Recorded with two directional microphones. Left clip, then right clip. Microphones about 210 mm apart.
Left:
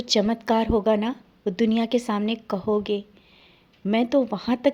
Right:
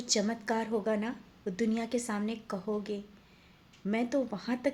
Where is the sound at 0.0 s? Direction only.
35° left (ahead or behind).